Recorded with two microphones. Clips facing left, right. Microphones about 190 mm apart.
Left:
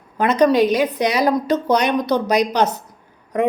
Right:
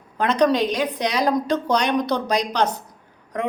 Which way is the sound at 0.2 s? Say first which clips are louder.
Left 4 dB; 5° left (ahead or behind).